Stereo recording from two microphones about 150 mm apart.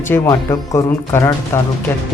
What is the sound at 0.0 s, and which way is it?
Speech, 15° left (ahead or behind).